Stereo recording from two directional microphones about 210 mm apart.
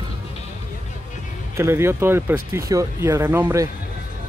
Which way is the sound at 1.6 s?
10° right (ahead or behind).